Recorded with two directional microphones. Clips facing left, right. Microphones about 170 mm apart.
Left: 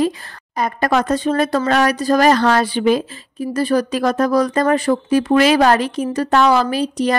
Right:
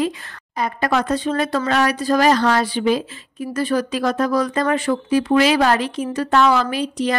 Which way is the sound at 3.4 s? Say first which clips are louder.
Left 3 dB; 35° left (ahead or behind).